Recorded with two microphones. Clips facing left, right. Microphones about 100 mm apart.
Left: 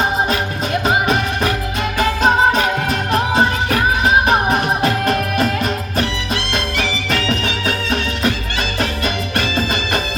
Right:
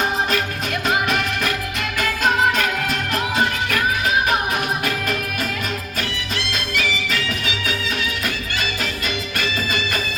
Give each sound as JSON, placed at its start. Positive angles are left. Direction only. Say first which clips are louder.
{"t": 0.3, "sound": "music", "louder": "left 3 dB", "side_deg": 30}
{"t": 6.5, "sound": "music", "louder": "left 1 dB", "side_deg": 45}
{"t": 9.4, "sound": "music", "louder": "left 3 dB", "side_deg": 40}